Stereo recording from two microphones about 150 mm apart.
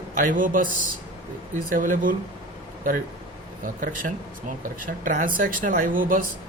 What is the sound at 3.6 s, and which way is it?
Speech, 65° right (ahead or behind).